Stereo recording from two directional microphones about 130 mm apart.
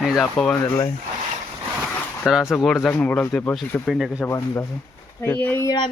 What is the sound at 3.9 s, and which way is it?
Speech, centre (ahead or behind).